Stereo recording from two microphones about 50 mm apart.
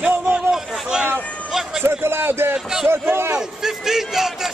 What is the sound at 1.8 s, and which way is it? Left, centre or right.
A man's voice, right.